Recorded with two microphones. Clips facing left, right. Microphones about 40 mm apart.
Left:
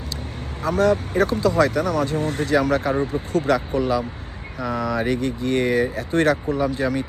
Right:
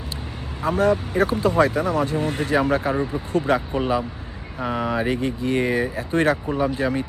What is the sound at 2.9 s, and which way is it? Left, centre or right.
Speech, right.